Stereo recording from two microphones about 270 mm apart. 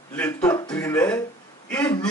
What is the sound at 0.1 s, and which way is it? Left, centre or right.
Speech, centre.